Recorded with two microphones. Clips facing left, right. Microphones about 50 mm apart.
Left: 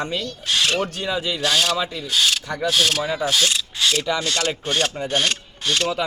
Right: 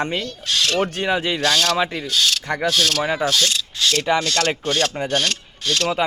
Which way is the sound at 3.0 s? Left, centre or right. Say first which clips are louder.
Right 2 dB; right.